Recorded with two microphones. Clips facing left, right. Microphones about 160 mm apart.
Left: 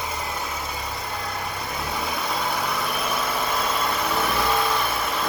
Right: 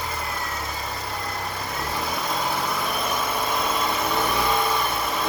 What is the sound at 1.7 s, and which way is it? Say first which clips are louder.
Vehicle: even; centre (ahead or behind).